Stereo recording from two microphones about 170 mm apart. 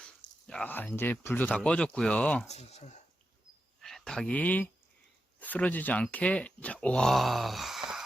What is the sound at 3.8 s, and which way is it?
Speech, centre (ahead or behind).